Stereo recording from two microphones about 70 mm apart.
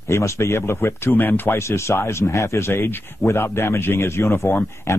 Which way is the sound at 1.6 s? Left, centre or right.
Left.